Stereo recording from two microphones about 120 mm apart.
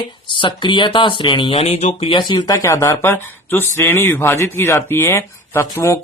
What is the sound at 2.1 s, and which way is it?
Speech, 40° left (ahead or behind).